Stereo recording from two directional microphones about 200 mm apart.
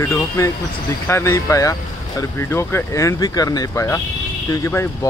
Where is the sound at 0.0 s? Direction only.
15° left (ahead or behind).